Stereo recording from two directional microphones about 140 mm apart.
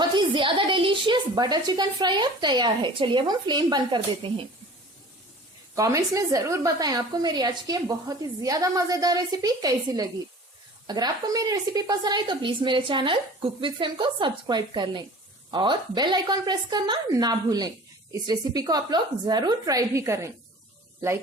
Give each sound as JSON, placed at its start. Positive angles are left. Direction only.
{"t": 0.0, "sound": "a woman's voice", "side_deg": -30}
{"t": 5.7, "sound": "a woman's voice", "side_deg": -25}